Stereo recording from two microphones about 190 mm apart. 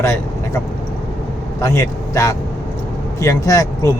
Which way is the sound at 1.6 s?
15° left (ahead or behind).